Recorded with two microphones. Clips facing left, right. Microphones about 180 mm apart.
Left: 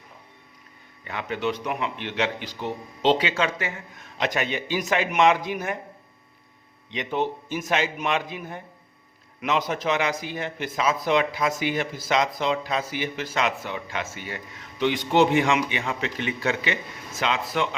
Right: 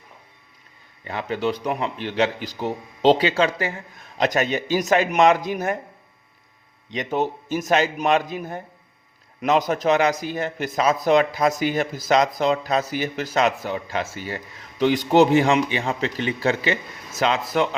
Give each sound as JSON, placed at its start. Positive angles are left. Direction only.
{"t": 1.0, "sound": "a man's voice", "side_deg": -35}
{"t": 6.9, "sound": "a man's voice", "side_deg": -40}